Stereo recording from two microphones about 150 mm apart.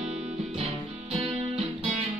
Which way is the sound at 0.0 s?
40° right (ahead or behind).